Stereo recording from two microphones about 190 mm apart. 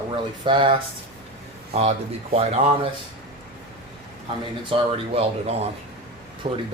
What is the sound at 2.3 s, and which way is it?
Speech, 35° right (ahead or behind).